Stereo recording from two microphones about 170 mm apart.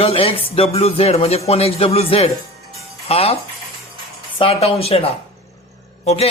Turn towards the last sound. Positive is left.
turn(degrees=35)  # may be behind; listen again after turning